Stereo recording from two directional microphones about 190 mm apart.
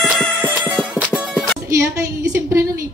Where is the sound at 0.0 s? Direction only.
Centre (ahead or behind).